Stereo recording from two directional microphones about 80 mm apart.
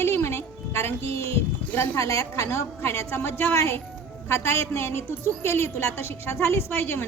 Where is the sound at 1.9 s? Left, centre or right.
Left.